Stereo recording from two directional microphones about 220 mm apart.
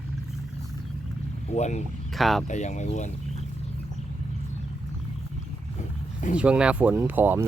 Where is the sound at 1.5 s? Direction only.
30° left (ahead or behind).